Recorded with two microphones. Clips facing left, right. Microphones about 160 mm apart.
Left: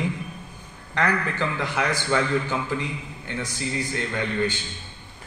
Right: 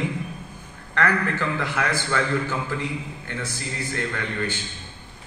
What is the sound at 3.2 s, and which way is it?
A man's voice, 15° left (ahead or behind).